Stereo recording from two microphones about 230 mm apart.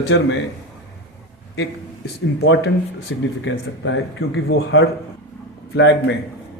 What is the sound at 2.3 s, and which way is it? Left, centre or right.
Speech, left.